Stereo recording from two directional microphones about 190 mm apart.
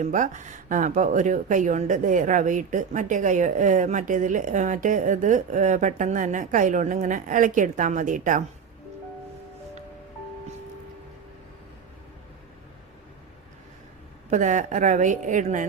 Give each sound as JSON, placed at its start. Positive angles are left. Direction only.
{"t": 0.0, "sound": "speech", "side_deg": -40}
{"t": 14.3, "sound": "speech", "side_deg": -40}